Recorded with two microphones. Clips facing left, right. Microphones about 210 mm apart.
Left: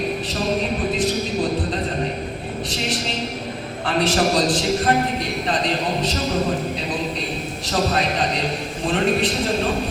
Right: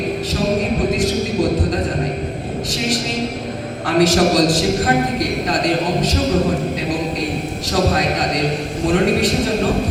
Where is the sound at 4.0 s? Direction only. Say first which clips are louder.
Right 5 dB; 45° right (ahead or behind).